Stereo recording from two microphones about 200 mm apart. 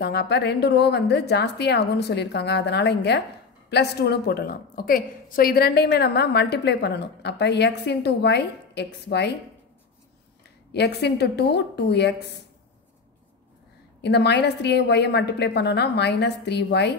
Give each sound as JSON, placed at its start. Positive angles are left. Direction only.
{"t": 0.0, "sound": "a woman's voice", "side_deg": 55}
{"t": 10.7, "sound": "a woman's voice", "side_deg": 55}
{"t": 14.0, "sound": "a woman's voice", "side_deg": 55}